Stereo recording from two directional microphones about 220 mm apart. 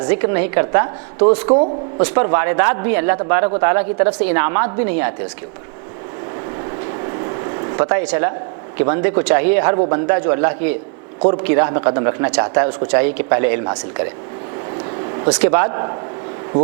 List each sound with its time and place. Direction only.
0.1 s speech: 10° right (ahead or behind)
1.5 s speech: 25° right (ahead or behind)
2.0 s speech: 15° right (ahead or behind)
7.8 s speech: 15° right (ahead or behind)
15.3 s speech: 10° right (ahead or behind)